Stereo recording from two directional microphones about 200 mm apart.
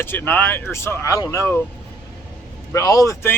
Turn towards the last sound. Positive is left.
turn(degrees=15)  # may be behind; listen again after turning